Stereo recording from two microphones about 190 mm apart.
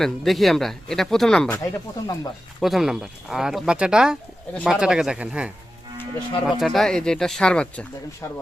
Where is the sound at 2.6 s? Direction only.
Centre (ahead or behind).